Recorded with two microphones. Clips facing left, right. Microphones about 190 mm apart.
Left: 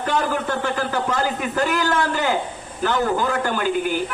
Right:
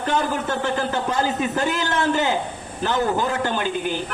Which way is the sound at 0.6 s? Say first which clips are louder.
Even; 25° right (ahead or behind).